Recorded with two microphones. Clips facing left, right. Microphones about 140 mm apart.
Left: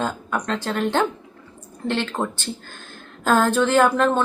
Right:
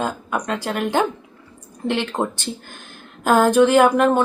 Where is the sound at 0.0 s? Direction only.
10° right (ahead or behind).